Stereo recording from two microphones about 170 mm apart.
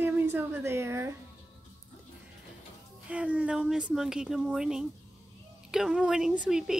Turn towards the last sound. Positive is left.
turn(degrees=-5)  # may be behind; listen again after turning